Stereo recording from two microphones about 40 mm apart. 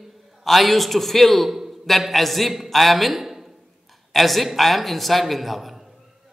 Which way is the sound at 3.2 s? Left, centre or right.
Centre.